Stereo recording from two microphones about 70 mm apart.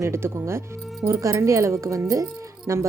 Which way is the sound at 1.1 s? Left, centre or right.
Right.